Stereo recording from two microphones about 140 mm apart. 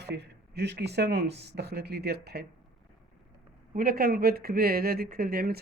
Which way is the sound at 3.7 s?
90° right.